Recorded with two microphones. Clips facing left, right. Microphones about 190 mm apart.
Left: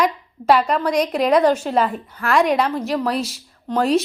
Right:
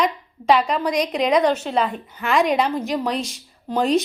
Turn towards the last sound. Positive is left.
turn(degrees=0)  # may be behind; listen again after turning